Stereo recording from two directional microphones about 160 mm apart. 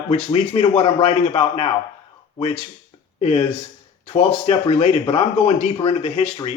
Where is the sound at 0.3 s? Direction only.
40° left (ahead or behind).